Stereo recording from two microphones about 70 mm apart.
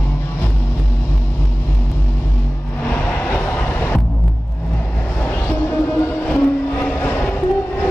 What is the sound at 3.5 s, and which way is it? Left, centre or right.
Music, left.